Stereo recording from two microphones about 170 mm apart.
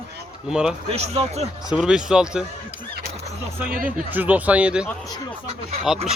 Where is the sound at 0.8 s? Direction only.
40° right (ahead or behind).